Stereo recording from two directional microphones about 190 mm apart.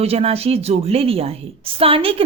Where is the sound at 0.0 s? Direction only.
30° right (ahead or behind).